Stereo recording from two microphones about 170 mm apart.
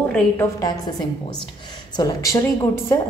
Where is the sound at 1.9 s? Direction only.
20° left (ahead or behind).